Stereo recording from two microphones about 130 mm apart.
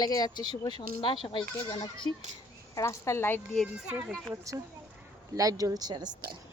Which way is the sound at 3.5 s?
Centre (ahead or behind).